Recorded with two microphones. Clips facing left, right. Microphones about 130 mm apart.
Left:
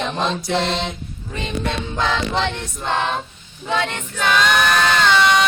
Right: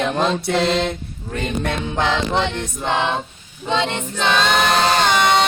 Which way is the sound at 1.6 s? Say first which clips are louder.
Even; 55° right (ahead or behind).